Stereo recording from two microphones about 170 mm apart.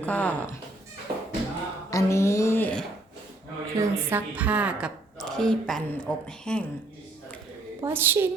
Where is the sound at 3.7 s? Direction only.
15° right (ahead or behind); by 6.6 s 5° left (ahead or behind).